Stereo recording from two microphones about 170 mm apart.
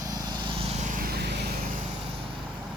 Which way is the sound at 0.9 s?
70° right (ahead or behind).